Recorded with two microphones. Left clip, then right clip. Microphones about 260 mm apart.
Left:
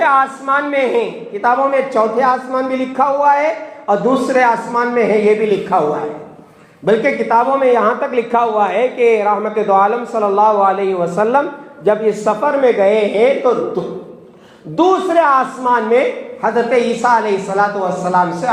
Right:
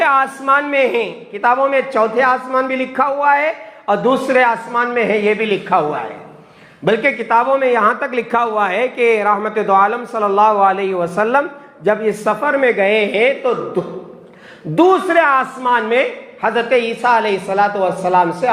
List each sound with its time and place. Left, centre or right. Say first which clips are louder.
0.0 s a man's voice: left 1 dB; right
6.8 s a man's voice: left 1 dB; right
14.8 s a man's voice: even; right